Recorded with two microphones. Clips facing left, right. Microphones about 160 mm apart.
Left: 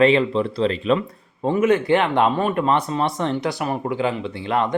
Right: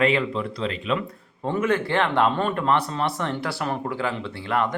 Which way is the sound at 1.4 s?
15° left (ahead or behind).